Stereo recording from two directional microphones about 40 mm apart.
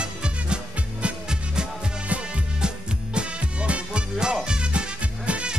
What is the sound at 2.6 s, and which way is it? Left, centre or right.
Music, right.